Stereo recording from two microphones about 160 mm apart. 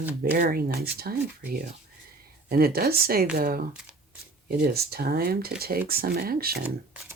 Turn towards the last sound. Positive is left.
turn(degrees=-70)  # may be behind; listen again after turning